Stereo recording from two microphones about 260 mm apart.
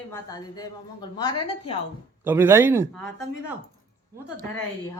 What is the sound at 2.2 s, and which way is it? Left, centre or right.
Speech, centre.